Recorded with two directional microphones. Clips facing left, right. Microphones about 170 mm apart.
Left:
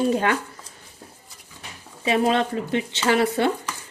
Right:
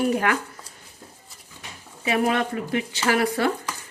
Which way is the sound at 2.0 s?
25° left (ahead or behind).